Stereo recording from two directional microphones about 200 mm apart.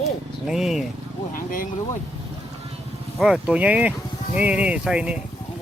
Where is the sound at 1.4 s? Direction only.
45° left (ahead or behind).